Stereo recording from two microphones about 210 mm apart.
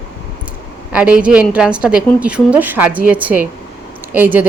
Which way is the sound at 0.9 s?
5° right (ahead or behind).